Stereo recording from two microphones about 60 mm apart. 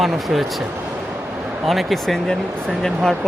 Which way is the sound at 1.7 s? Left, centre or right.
Centre.